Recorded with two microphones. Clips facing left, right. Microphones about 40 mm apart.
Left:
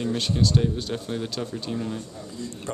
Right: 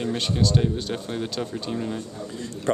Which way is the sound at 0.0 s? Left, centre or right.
Centre.